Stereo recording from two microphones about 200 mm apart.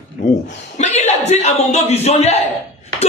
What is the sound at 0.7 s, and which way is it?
A man's voice, 35° left (ahead or behind).